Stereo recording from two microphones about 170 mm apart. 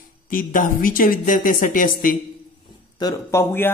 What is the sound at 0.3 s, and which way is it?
A woman's voice, 55° left (ahead or behind).